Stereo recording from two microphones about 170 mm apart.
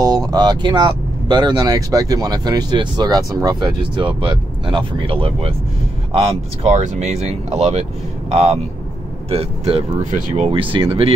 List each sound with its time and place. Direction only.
0.3 s speech: 25° right (ahead or behind)